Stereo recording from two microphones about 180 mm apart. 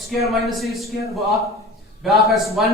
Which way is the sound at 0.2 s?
Centre (ahead or behind).